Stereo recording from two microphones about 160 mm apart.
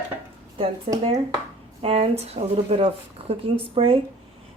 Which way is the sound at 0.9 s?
40° right (ahead or behind).